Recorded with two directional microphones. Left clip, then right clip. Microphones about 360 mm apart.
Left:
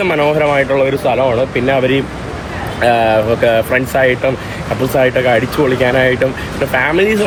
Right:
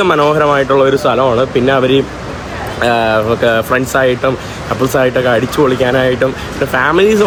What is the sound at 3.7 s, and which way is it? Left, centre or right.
Speech, right.